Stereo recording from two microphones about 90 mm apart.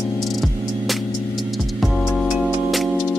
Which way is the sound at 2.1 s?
Centre (ahead or behind).